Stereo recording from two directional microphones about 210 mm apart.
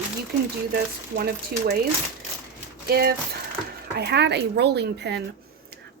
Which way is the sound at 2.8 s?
45° right (ahead or behind).